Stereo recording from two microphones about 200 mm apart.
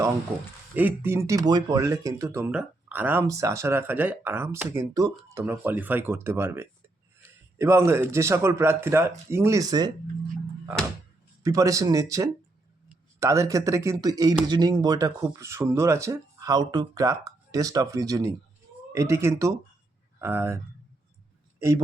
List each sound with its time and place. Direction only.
0.7 s speech: 10° right (ahead or behind)
11.4 s speech: 15° right (ahead or behind)